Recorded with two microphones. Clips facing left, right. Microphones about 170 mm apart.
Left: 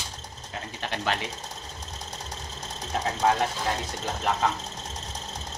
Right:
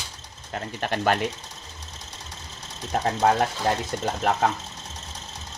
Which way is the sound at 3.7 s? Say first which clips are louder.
Right 5 dB; 45° right (ahead or behind).